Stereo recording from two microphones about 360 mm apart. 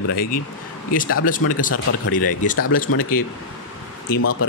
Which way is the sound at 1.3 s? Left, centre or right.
Left.